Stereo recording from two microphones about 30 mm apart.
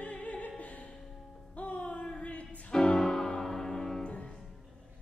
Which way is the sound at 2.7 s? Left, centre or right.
Centre.